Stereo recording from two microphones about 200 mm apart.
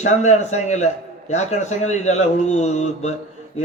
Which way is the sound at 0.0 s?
35° left (ahead or behind).